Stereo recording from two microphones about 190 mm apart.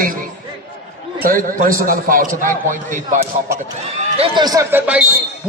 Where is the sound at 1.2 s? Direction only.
45° right (ahead or behind).